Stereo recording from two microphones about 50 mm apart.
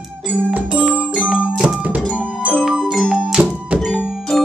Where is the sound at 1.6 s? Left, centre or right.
Centre.